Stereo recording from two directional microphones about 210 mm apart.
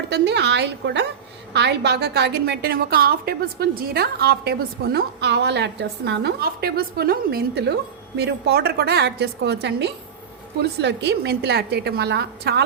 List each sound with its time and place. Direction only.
0.1 s a woman's voice: 55° right (ahead or behind)